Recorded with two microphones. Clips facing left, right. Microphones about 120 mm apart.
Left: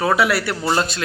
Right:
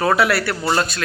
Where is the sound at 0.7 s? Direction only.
25° left (ahead or behind).